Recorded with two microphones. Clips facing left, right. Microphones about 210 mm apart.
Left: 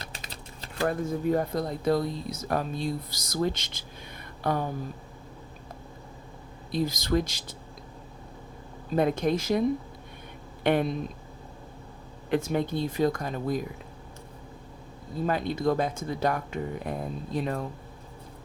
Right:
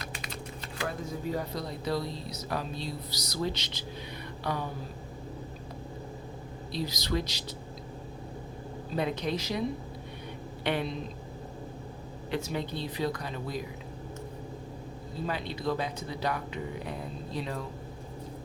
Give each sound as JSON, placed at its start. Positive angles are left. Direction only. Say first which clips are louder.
{"t": 0.0, "sound": "typing", "louder": "right 3 dB", "side_deg": 35}
{"t": 0.9, "sound": "speech", "louder": "left 8 dB", "side_deg": 50}
{"t": 6.7, "sound": "speech", "louder": "left 6 dB", "side_deg": 50}
{"t": 9.0, "sound": "a man's voice", "louder": "left 6 dB", "side_deg": 50}
{"t": 12.3, "sound": "speech", "louder": "left 7 dB", "side_deg": 50}
{"t": 15.3, "sound": "speech", "louder": "left 6 dB", "side_deg": 45}